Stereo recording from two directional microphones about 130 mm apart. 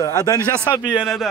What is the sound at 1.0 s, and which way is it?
Speech, centre (ahead or behind).